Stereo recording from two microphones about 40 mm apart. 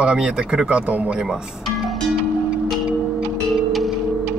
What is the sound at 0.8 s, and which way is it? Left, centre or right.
Speech, right.